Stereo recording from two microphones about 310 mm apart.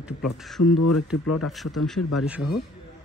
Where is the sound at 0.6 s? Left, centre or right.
Left.